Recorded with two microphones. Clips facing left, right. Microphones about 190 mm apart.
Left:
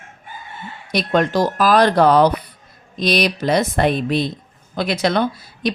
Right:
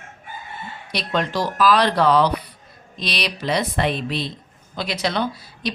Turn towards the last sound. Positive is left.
turn(degrees=50)  # may be behind; listen again after turning